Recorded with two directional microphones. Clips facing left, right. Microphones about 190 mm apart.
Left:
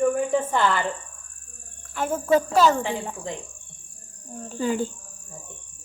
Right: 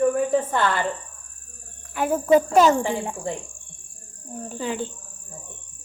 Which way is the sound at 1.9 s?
15° right (ahead or behind).